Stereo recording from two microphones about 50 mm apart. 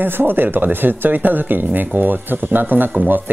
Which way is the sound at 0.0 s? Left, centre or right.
Right.